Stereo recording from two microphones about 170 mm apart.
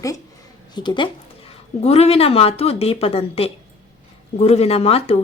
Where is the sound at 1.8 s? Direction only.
35° left (ahead or behind).